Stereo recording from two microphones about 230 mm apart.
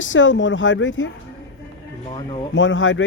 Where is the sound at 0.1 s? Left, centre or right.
Left.